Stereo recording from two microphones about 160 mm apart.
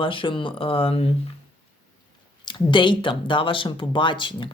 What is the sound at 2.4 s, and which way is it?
Speech, 30° left (ahead or behind).